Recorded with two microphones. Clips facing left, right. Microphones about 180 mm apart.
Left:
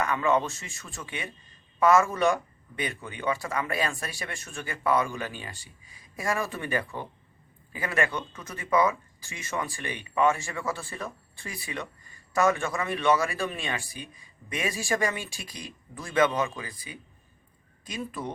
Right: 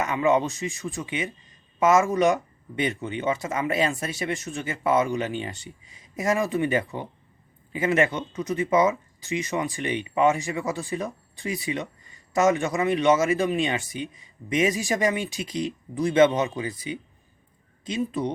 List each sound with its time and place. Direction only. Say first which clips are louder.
0.0 s speech: right 3 dB; 20° right (ahead or behind)